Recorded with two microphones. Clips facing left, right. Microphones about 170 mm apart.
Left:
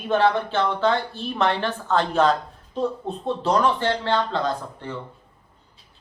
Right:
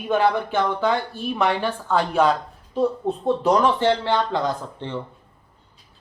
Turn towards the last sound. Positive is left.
turn(degrees=-20)  # may be behind; listen again after turning